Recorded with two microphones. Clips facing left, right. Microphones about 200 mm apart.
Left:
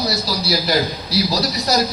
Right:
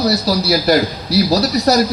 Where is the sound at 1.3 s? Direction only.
65° right (ahead or behind).